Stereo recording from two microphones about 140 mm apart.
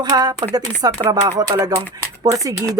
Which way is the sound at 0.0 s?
30° right (ahead or behind).